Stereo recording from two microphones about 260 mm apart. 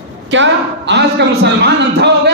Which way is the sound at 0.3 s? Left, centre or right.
Right.